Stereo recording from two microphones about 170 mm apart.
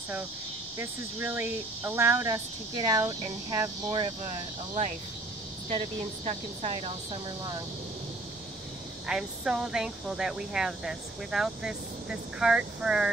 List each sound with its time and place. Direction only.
0.7 s speech: 10° right (ahead or behind)
5.7 s speech: 40° right (ahead or behind)
9.0 s speech: 5° right (ahead or behind)